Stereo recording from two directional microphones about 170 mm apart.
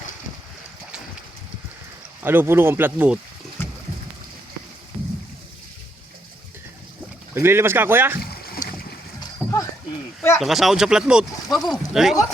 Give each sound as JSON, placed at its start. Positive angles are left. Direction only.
{"t": 2.2, "sound": "speech", "side_deg": -10}
{"t": 3.6, "sound": "a sound", "side_deg": 15}
{"t": 7.3, "sound": "speech", "side_deg": -15}
{"t": 9.2, "sound": "splash", "side_deg": 20}
{"t": 10.3, "sound": "speech", "side_deg": 0}